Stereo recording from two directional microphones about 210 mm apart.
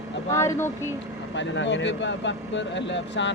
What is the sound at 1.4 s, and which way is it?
Speech, 60° left (ahead or behind).